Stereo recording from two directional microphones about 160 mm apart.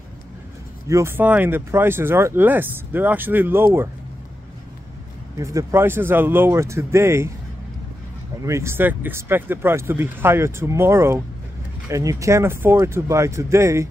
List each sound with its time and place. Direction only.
0.8 s speech: 15° right (ahead or behind)
5.4 s speech: 20° right (ahead or behind)
8.5 s speech: 15° right (ahead or behind)